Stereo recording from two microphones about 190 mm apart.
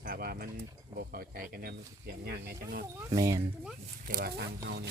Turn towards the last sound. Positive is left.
turn(degrees=-60)  # may be behind; listen again after turning